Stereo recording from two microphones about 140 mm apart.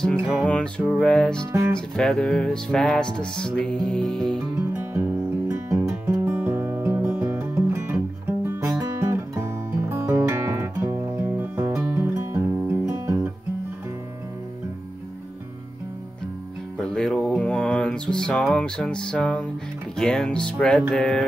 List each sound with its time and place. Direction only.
0.5 s music: 10° left (ahead or behind)
4.9 s music: 20° right (ahead or behind)
16.8 s music: 5° left (ahead or behind)